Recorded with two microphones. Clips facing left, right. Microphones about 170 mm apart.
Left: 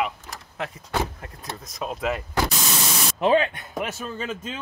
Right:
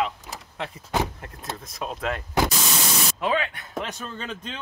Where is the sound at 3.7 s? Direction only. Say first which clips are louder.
Left 1 dB; 10° left (ahead or behind).